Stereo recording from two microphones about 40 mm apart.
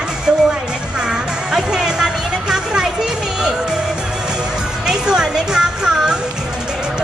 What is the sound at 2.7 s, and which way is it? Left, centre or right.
Children playing, centre.